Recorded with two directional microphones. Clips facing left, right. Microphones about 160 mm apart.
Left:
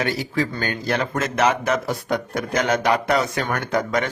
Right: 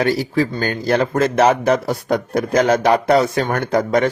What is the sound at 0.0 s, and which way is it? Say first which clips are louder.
Speech: right 6 dB; 35° right (ahead or behind).